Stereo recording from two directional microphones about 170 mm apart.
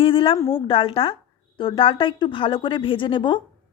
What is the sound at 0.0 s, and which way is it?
A woman's voice, 30° left (ahead or behind).